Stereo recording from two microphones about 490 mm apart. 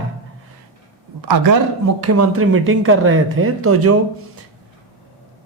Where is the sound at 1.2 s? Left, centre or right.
Right.